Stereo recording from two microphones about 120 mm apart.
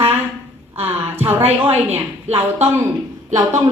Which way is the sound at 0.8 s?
20° right (ahead or behind).